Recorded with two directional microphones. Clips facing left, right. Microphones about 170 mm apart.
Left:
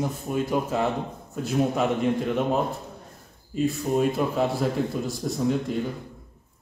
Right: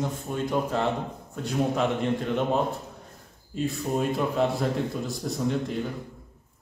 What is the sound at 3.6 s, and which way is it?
Speech, centre (ahead or behind).